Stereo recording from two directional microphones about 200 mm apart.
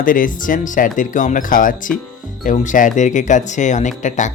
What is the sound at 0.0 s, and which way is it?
Speech, 45° left (ahead or behind).